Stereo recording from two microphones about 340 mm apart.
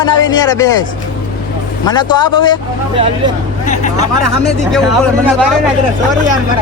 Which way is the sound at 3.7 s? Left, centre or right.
Centre.